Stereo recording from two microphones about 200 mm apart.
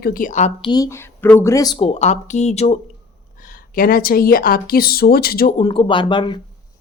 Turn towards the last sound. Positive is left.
turn(degrees=25)  # may be behind; listen again after turning